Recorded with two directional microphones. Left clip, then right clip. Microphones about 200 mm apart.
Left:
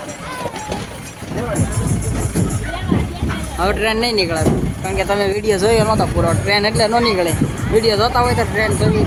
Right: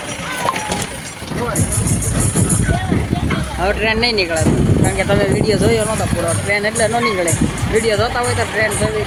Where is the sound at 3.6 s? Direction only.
15° left (ahead or behind).